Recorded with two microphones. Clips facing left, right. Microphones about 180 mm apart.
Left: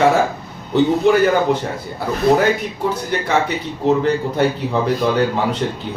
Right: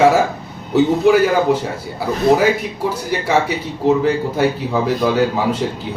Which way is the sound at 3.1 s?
5° right (ahead or behind).